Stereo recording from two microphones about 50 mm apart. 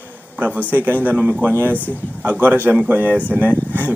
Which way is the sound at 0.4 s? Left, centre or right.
Right.